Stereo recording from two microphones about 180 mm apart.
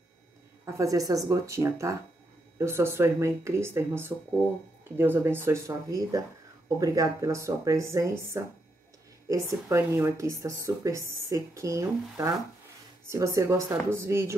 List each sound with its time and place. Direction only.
0.7 s speech: 20° right (ahead or behind)